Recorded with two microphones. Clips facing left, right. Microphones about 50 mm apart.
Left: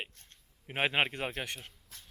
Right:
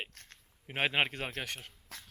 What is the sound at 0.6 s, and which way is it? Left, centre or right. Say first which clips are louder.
Speech: left 1 dB; centre.